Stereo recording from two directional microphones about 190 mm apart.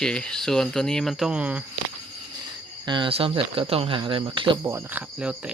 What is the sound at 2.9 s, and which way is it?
Speech, 25° right (ahead or behind).